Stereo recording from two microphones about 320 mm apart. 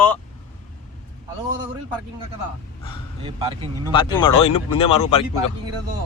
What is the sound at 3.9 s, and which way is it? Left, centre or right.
Speech, centre.